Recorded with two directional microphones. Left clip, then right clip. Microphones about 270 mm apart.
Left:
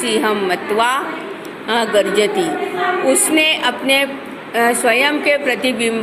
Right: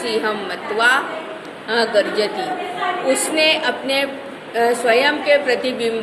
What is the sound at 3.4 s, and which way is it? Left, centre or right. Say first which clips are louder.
A woman's voice: left 1 dB; left.